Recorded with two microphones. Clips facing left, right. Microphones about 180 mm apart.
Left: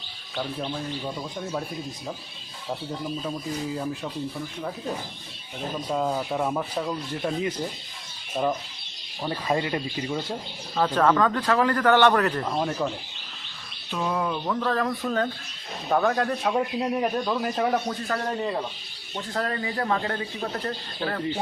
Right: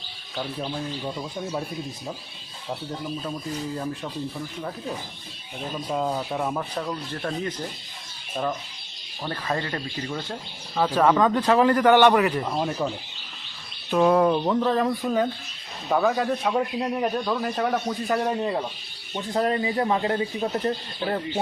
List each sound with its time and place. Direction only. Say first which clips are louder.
0.3 s a man's voice: even; 5° right (ahead or behind)
5.9 s a man's voice: even; centre (ahead or behind)
9.2 s speech: left 2 dB; 10° left (ahead or behind)
10.8 s speech: right 1 dB; 10° right (ahead or behind)
13.9 s speech: right 9 dB; 55° right (ahead or behind)
14.3 s speech: right 4 dB; 25° right (ahead or behind)
15.9 s a man's voice: right 1 dB; 5° right (ahead or behind)
18.1 s speech: right 4 dB; 20° right (ahead or behind)